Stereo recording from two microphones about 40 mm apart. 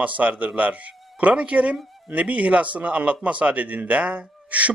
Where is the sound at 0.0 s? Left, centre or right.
Right.